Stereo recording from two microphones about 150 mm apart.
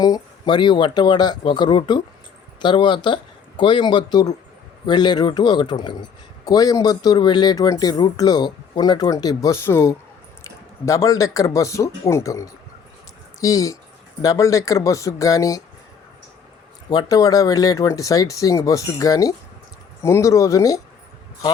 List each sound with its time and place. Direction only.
0.0 s a man's voice: 30° left (ahead or behind)
16.9 s a man's voice: 25° left (ahead or behind)